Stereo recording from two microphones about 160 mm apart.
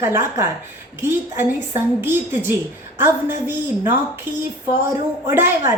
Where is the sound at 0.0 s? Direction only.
15° right (ahead or behind).